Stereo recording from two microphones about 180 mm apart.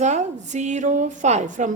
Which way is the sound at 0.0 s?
40° right (ahead or behind).